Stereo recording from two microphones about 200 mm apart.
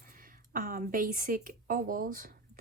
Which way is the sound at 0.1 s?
45° right (ahead or behind).